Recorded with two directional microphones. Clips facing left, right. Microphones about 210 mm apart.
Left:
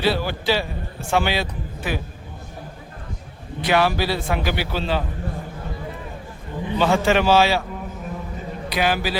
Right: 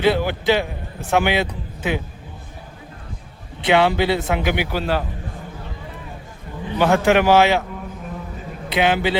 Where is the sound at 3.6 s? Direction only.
20° right (ahead or behind).